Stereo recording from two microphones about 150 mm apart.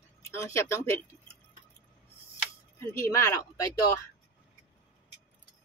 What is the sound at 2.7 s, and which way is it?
Speech, 20° left (ahead or behind).